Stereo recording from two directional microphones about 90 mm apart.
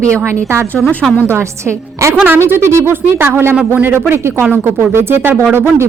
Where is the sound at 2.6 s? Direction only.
30° right (ahead or behind).